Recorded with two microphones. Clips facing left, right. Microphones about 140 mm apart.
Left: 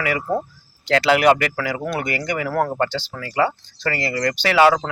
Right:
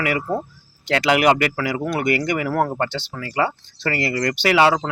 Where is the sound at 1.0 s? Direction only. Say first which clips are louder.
Even; 15° right (ahead or behind).